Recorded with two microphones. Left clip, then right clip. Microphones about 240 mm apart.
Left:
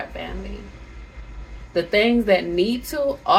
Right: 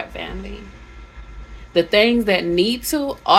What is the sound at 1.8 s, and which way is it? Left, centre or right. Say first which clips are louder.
Speech: right 4 dB; right.